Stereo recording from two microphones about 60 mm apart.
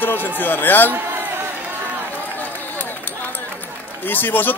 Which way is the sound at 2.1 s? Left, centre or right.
Left.